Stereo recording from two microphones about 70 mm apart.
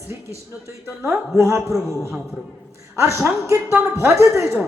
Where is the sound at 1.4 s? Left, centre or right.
Right.